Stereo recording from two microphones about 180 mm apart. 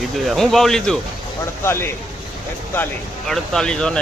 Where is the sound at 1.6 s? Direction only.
15° left (ahead or behind).